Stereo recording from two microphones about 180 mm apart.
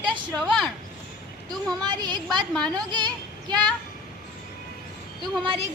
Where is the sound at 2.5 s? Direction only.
5° left (ahead or behind).